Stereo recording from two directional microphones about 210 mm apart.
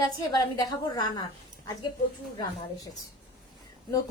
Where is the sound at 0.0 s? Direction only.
15° left (ahead or behind).